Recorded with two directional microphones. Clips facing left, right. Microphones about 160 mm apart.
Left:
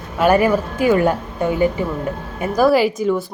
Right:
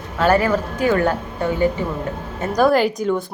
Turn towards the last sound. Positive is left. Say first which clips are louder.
# left 2 dB
turn(degrees=0)  # may be behind; listen again after turning